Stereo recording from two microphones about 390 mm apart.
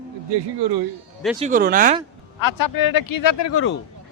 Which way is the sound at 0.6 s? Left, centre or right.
Right.